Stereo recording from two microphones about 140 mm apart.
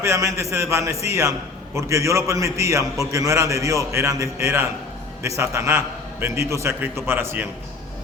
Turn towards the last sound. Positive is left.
turn(degrees=-15)  # may be behind; listen again after turning